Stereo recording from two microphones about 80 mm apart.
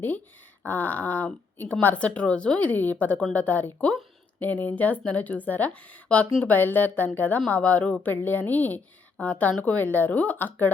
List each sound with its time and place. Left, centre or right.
0.6 s speech: left